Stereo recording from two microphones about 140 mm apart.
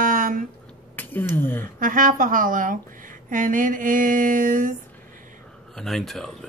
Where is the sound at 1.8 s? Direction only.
75° right (ahead or behind).